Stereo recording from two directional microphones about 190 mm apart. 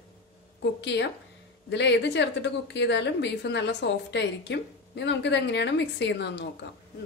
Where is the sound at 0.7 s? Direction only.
65° left (ahead or behind).